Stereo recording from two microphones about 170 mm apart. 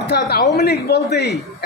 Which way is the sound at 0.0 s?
70° left (ahead or behind).